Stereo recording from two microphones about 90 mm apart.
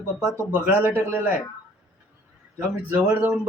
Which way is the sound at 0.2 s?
25° right (ahead or behind).